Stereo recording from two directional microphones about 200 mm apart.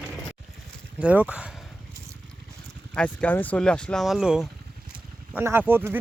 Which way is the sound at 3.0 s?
5° left (ahead or behind).